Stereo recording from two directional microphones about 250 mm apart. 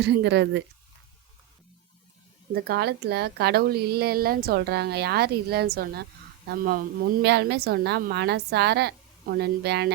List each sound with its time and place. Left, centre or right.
0.0 s speech: right
2.5 s a woman's voice: right